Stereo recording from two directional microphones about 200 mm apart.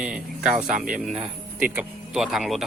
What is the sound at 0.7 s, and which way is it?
Speech, 40° right (ahead or behind).